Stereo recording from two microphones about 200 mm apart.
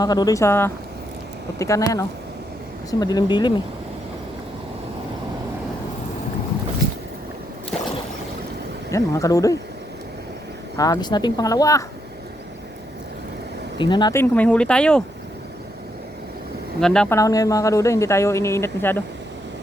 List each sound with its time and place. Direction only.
0.0 s a man's voice: 20° left (ahead or behind)
8.9 s a man's voice: 15° left (ahead or behind)
10.8 s speech: 20° left (ahead or behind)
13.7 s a man's voice: 25° left (ahead or behind); by 15.0 s 5° left (ahead or behind)
16.8 s speech: 5° left (ahead or behind)
17.2 s a man's voice: 15° left (ahead or behind)